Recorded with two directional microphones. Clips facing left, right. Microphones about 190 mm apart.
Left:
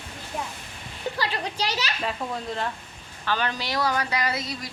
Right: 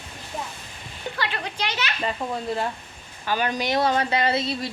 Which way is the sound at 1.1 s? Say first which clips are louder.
Right 1 dB; 35° left (ahead or behind).